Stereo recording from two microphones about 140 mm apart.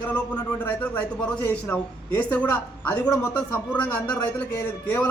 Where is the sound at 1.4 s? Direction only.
10° left (ahead or behind).